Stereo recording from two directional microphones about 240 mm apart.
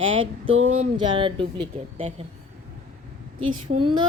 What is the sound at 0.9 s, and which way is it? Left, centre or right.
Speech, right.